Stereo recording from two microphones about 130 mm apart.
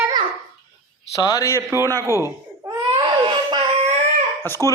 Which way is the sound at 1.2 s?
30° left (ahead or behind).